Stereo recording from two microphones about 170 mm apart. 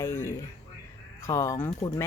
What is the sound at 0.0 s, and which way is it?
A man's voice, 15° left (ahead or behind).